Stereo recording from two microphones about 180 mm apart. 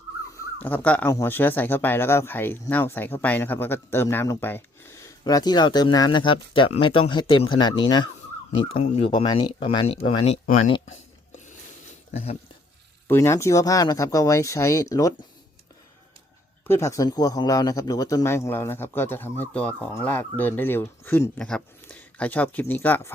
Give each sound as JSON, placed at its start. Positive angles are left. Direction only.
{"t": 0.3, "sound": "a sound", "side_deg": 10}
{"t": 1.1, "sound": "speech", "side_deg": 10}
{"t": 10.4, "sound": "speech", "side_deg": 50}
{"t": 12.1, "sound": "speech", "side_deg": 35}
{"t": 13.1, "sound": "speech", "side_deg": 15}
{"t": 16.6, "sound": "speech", "side_deg": 15}